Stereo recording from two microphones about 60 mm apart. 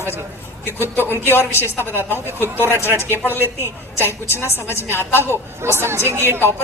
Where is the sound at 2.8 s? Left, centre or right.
Right.